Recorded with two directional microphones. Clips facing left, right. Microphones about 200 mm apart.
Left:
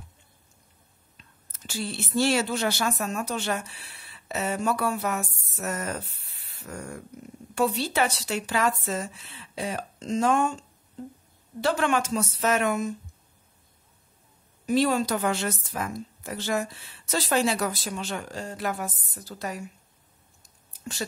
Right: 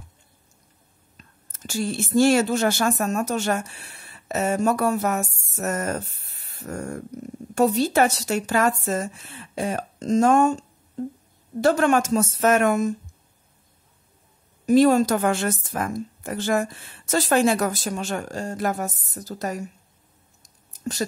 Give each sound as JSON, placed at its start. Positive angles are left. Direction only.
{"t": 1.1, "sound": "a woman's voice", "side_deg": -45}
{"t": 11.6, "sound": "a woman's voice", "side_deg": -45}
{"t": 14.7, "sound": "a woman's voice", "side_deg": -45}
{"t": 20.4, "sound": "a sound", "side_deg": -40}